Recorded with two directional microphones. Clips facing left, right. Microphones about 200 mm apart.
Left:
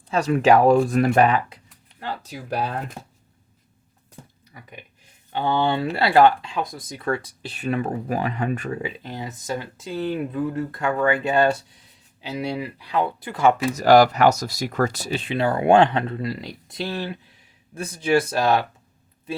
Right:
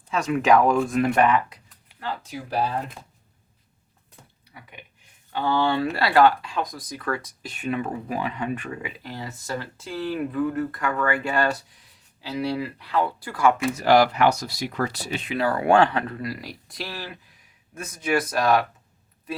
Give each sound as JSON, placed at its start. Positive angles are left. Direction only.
{"t": 0.1, "sound": "speech", "side_deg": 35}
{"t": 5.3, "sound": "speech", "side_deg": 20}
{"t": 9.0, "sound": "speech", "side_deg": 20}
{"t": 13.7, "sound": "speech", "side_deg": 40}